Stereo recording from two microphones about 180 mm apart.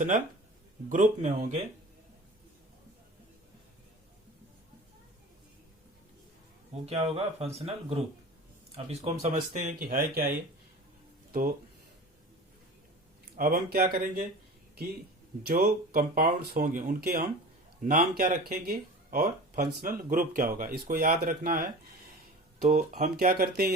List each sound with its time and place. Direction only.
0.9 s speech: 45° right (ahead or behind)
6.8 s speech: 35° right (ahead or behind); by 11.5 s 50° right (ahead or behind)
13.3 s speech: 55° right (ahead or behind)
15.4 s speech: 55° right (ahead or behind)
22.7 s speech: 40° right (ahead or behind); by 23.7 s 60° right (ahead or behind)